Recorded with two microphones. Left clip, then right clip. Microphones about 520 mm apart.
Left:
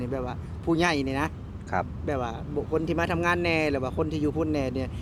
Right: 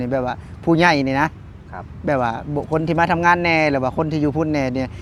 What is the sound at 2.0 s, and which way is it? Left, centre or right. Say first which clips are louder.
Speech: right 11 dB; right.